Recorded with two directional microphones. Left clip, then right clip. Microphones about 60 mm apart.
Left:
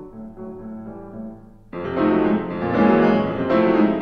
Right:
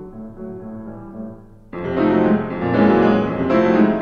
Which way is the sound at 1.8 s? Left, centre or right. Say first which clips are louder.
Right 2 dB; right.